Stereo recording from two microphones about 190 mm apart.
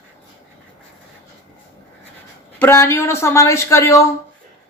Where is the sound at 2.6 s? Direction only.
15° left (ahead or behind).